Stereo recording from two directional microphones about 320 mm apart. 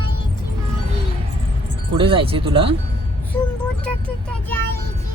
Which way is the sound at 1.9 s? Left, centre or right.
Centre.